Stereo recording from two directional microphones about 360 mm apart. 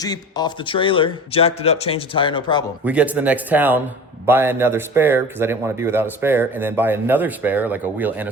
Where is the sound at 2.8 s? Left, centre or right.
Centre.